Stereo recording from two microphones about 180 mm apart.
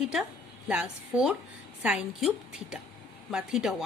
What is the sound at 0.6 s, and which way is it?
A woman's voice, 5° right (ahead or behind).